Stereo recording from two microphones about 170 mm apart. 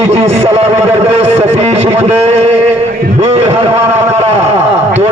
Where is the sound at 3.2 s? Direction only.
35° right (ahead or behind).